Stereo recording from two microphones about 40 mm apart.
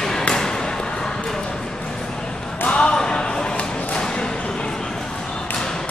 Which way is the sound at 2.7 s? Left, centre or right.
Left.